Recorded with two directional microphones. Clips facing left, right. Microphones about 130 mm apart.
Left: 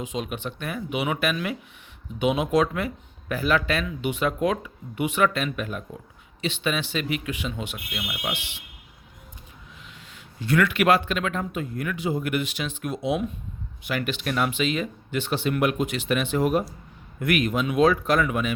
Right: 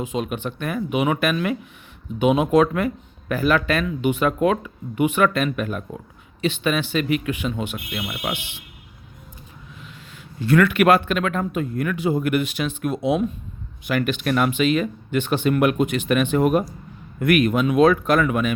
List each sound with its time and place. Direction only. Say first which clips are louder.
0.0 s speech: right 5 dB; 50° right (ahead or behind)
10.4 s speech: right 5 dB; 50° right (ahead or behind)